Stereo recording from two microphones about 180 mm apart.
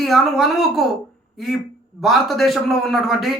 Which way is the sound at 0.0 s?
Centre (ahead or behind).